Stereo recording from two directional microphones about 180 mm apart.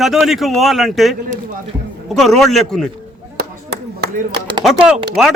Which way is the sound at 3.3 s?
65° right (ahead or behind).